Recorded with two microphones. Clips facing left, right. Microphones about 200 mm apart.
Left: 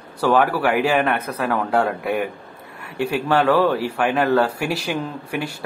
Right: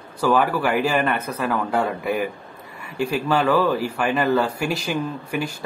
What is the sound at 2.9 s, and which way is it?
Speech, 60° left (ahead or behind).